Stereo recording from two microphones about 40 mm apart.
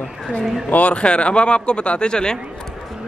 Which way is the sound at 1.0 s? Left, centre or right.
Left.